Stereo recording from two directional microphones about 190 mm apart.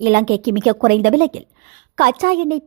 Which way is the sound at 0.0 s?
55° right (ahead or behind).